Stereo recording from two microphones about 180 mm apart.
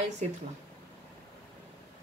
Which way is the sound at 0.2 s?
40° right (ahead or behind).